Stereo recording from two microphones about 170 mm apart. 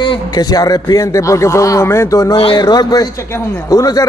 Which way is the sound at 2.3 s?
30° left (ahead or behind).